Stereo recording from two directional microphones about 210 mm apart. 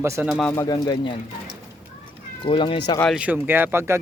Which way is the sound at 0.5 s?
15° left (ahead or behind).